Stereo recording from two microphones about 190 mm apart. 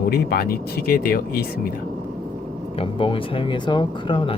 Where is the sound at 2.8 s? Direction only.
25° left (ahead or behind).